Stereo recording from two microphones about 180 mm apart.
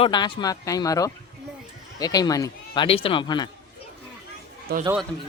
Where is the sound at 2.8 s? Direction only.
30° left (ahead or behind).